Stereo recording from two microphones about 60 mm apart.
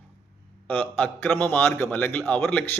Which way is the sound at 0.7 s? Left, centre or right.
Left.